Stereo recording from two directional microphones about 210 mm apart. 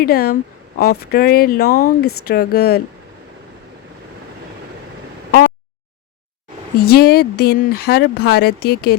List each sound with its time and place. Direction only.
0.0 s speech: 45° left (ahead or behind)
6.9 s speech: 50° left (ahead or behind)